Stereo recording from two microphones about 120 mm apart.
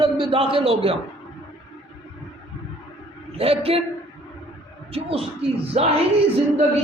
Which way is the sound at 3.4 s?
55° right (ahead or behind).